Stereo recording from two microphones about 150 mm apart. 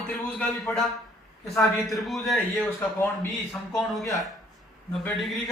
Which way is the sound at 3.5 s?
Centre (ahead or behind).